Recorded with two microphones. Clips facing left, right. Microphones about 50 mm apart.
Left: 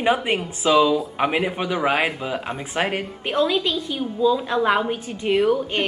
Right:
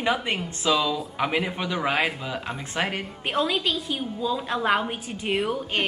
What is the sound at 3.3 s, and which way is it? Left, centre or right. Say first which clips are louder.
A woman's voice: left 4 dB; centre.